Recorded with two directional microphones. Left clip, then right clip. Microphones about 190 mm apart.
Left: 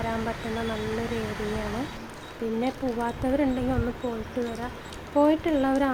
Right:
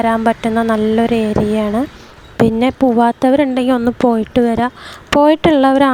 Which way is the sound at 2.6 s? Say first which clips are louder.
Right 14 dB; 55° right (ahead or behind).